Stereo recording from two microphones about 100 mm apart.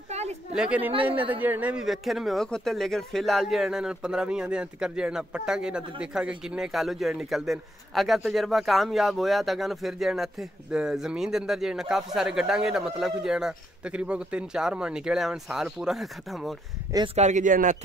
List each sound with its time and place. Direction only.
0.6 s a man's voice: 15° right (ahead or behind)
1.9 s speech: centre (ahead or behind)
17.2 s speech: 90° right